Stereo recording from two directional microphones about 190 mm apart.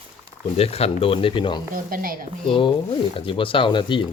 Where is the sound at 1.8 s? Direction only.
50° right (ahead or behind).